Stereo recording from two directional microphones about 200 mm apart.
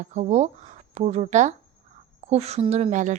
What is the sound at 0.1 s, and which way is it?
Speech, 35° right (ahead or behind).